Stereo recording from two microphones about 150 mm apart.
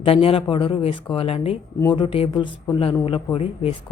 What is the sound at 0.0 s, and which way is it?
Speech, 40° left (ahead or behind).